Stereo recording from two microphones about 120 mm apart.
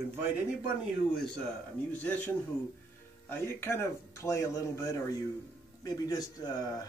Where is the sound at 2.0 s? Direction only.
10° left (ahead or behind).